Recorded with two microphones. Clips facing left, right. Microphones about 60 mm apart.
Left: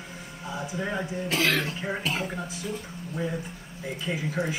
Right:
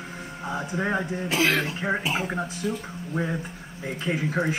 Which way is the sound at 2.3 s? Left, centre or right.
Right.